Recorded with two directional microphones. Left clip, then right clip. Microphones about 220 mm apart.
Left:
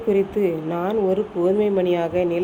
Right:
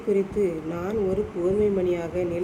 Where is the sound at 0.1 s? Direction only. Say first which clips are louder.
Left 4 dB; 20° left (ahead or behind).